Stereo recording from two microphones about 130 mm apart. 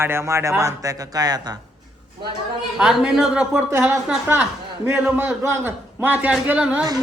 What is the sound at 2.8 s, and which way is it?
Speech, 5° right (ahead or behind).